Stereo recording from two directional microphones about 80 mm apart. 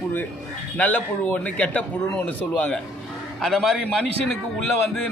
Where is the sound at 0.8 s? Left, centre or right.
Centre.